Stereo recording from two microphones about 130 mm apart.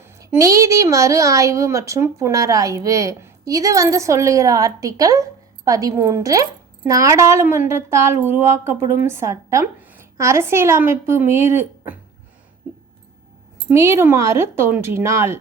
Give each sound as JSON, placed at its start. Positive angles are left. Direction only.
{"t": 0.0, "sound": "speech", "side_deg": -20}
{"t": 13.7, "sound": "speech", "side_deg": -20}